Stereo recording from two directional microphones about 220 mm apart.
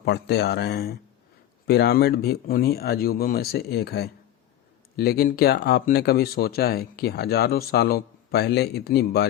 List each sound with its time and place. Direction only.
0.0 s speech: 50° left (ahead or behind)